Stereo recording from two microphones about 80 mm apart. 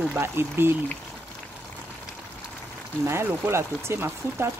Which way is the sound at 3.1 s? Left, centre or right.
Right.